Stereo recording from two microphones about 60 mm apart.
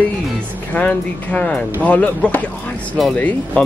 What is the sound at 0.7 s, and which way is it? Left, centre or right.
Speech, left.